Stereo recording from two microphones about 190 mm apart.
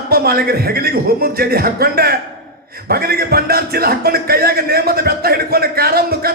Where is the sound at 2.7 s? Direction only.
55° right (ahead or behind).